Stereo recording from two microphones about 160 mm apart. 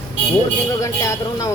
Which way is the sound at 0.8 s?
20° left (ahead or behind).